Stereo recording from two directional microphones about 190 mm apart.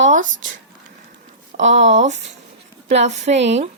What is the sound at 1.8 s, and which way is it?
Speech, 40° right (ahead or behind).